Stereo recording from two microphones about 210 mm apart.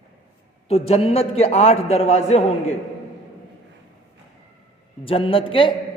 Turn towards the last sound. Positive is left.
turn(degrees=25)  # may be behind; listen again after turning